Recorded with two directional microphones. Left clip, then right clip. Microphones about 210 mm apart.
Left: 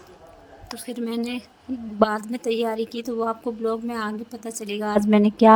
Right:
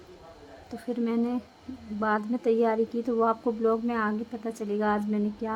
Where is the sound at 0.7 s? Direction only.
45° left (ahead or behind).